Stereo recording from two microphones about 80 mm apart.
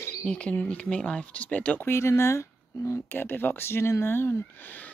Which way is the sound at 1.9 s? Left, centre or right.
Left.